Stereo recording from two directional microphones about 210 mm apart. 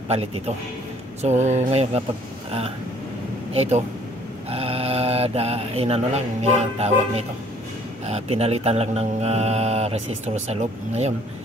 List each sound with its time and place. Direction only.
1.2 s speech: 35° right (ahead or behind)
3.5 s speech: 30° right (ahead or behind)
4.5 s mantra: 30° right (ahead or behind)
8.1 s speech: 30° right (ahead or behind)